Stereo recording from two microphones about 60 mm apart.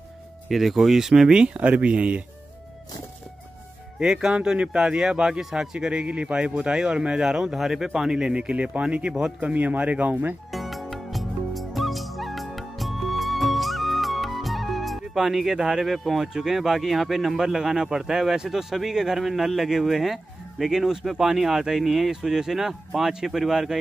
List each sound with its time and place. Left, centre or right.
0.5 s speech: centre; by 2.2 s right
4.0 s speech: centre; by 10.3 s right
10.5 s music: centre